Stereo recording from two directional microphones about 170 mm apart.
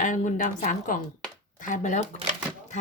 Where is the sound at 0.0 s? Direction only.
50° left (ahead or behind).